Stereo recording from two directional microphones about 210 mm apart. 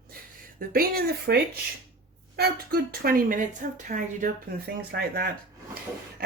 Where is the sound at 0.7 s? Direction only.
50° right (ahead or behind).